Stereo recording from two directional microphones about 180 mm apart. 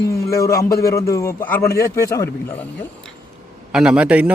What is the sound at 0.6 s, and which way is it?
A man's voice, 15° left (ahead or behind).